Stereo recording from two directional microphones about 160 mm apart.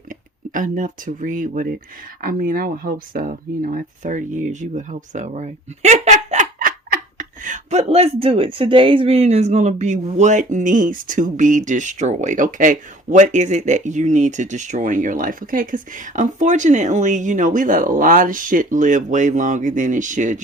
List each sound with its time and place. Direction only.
0.1 s speech: 55° right (ahead or behind)